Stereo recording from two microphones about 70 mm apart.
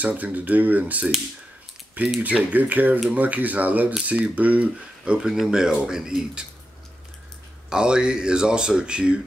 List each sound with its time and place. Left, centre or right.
0.0 s speech: right
2.2 s speech: right
7.7 s speech: centre